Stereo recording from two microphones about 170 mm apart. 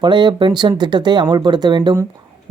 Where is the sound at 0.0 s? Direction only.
25° right (ahead or behind).